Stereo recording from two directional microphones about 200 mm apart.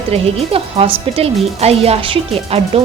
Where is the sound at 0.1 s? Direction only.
30° right (ahead or behind).